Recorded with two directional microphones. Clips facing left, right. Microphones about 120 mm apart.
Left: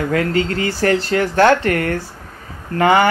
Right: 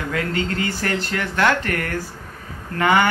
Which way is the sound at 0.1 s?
35° left (ahead or behind).